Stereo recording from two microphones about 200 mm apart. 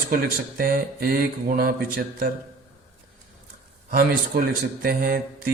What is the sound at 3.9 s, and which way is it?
Speech, 50° right (ahead or behind).